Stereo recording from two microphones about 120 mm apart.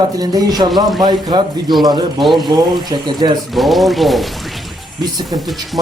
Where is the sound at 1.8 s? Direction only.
35° right (ahead or behind).